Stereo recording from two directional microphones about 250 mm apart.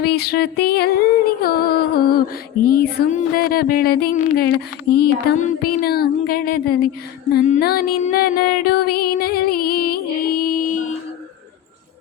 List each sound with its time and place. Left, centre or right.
0.0 s music: left